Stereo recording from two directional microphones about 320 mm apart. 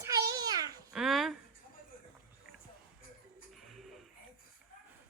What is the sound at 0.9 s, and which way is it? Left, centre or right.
Speech, centre.